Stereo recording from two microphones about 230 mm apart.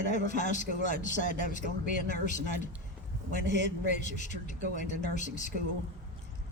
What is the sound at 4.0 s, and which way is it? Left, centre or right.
A man's voice, left.